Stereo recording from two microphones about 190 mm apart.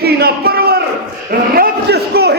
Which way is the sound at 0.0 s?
55° right (ahead or behind).